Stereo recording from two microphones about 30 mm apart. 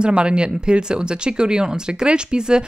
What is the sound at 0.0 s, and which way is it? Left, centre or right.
Speech, right.